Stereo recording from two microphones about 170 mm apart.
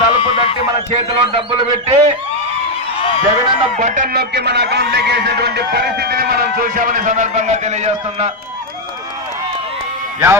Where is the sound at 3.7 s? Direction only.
50° right (ahead or behind).